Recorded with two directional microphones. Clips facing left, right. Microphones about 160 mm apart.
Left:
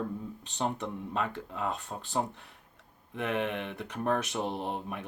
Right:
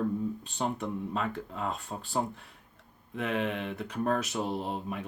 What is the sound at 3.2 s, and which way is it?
Speech, 15° right (ahead or behind).